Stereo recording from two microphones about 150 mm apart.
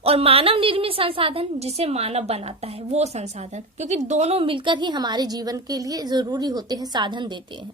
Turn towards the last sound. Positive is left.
turn(degrees=-30)  # may be behind; listen again after turning